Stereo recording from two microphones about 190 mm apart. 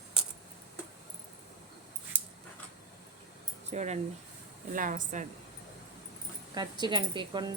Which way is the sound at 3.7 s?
35° right (ahead or behind).